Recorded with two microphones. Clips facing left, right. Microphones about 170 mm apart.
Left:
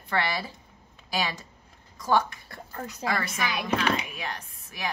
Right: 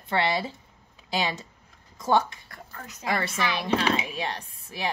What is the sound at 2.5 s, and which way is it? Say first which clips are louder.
Speech: left 5 dB; 35° left (ahead or behind).